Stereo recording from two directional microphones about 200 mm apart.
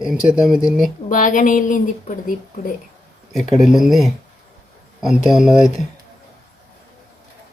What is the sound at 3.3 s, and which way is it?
Speech, centre (ahead or behind).